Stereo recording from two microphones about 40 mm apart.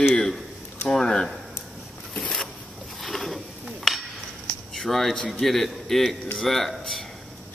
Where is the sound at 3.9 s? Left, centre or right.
Centre.